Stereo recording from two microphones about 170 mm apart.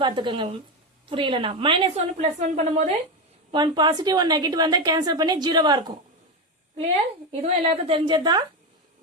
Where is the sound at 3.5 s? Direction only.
25° right (ahead or behind).